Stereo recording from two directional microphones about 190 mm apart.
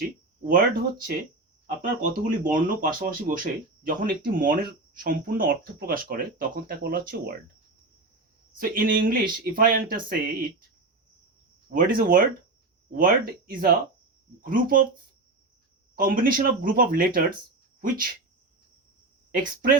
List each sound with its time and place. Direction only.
0.4 s speech: 50° right (ahead or behind)
8.5 s speech: 50° right (ahead or behind)
11.7 s speech: 50° right (ahead or behind)
16.0 s speech: 50° right (ahead or behind)
19.3 s speech: 50° right (ahead or behind)